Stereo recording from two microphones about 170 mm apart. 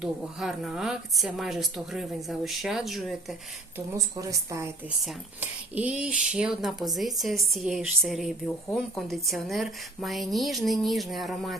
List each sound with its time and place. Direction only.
0.0 s speech: 5° right (ahead or behind)
3.9 s speech: 20° right (ahead or behind)
5.0 s speech: 10° right (ahead or behind)